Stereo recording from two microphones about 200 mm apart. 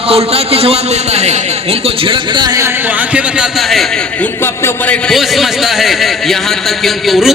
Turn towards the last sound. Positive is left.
turn(degrees=0)  # may be behind; listen again after turning